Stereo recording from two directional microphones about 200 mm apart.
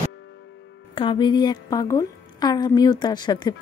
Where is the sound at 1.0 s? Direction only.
25° left (ahead or behind).